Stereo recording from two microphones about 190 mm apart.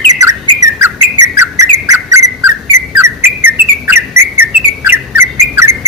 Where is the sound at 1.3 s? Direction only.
15° right (ahead or behind).